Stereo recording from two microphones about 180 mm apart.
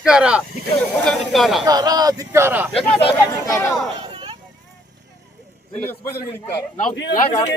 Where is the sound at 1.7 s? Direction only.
20° right (ahead or behind).